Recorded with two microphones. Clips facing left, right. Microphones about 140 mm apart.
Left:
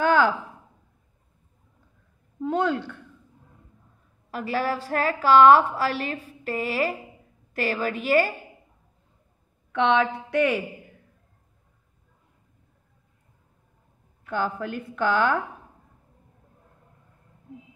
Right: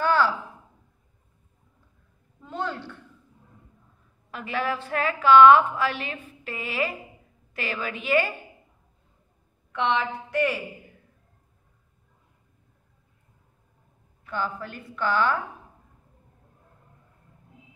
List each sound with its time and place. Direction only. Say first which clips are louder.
0.0 s a sound: left 2 dB; 55° left (ahead or behind)
2.4 s speech: left 8 dB; 60° left (ahead or behind)
4.3 s a woman's voice: left 2 dB; 40° left (ahead or behind)
9.9 s a woman's voice: left 4 dB; 60° left (ahead or behind)
14.3 s a woman's voice: left 4 dB; 50° left (ahead or behind)